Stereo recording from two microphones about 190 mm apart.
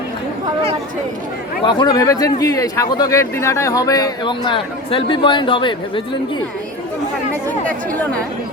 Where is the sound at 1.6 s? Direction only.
25° left (ahead or behind).